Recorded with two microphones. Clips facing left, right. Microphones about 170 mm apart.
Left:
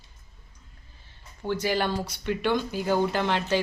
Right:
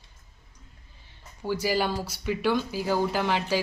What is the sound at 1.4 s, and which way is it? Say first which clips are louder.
Speech: even; 5° right (ahead or behind).